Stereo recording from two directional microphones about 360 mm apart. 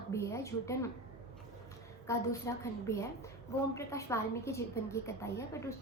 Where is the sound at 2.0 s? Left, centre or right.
Centre.